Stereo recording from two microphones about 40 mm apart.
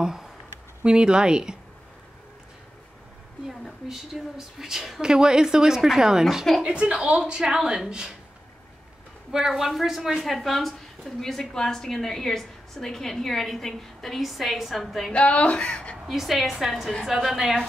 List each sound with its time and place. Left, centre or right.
0.0 s a woman's voice: centre
3.9 s speech: centre
5.0 s speech: centre
6.6 s a woman's voice: right
9.3 s a woman's voice: centre
15.1 s speech: left
16.1 s a woman's voice: centre